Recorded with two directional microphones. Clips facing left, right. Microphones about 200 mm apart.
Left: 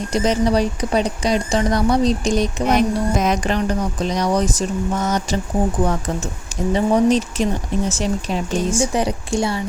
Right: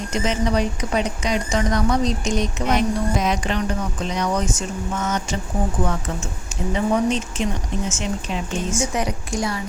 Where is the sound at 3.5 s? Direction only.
35° left (ahead or behind).